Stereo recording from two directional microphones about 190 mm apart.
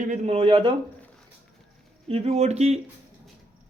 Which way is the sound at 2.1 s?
30° right (ahead or behind).